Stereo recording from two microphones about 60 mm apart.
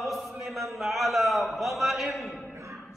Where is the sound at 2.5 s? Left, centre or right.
Right.